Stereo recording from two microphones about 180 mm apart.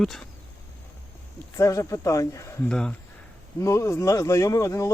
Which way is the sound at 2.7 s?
5° left (ahead or behind).